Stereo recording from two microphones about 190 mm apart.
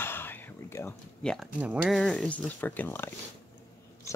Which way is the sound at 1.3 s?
5° right (ahead or behind).